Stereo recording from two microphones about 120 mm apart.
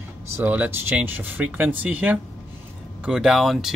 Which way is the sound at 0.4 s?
15° right (ahead or behind).